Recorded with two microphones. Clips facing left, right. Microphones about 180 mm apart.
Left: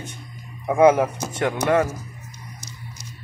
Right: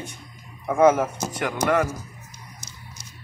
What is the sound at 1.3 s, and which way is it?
Speech, 25° left (ahead or behind).